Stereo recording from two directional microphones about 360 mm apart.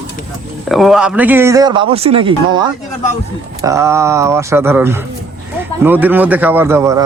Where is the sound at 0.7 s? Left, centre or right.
Centre.